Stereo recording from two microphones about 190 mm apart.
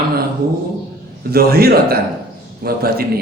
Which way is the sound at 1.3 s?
55° right (ahead or behind).